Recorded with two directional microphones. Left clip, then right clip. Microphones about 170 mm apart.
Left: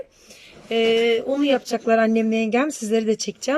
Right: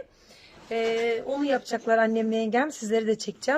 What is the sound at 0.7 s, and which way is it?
Speech, 15° left (ahead or behind).